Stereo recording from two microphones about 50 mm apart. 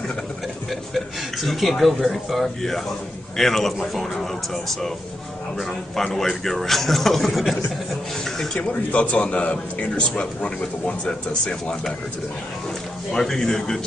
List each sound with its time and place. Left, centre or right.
0.7 s speech: centre
8.5 s a man's voice: left
13.1 s a man's voice: centre